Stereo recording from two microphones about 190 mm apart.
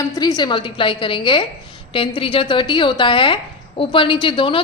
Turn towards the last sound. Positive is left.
turn(degrees=25)  # may be behind; listen again after turning